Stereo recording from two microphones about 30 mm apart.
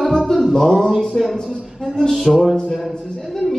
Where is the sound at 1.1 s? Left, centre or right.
Centre.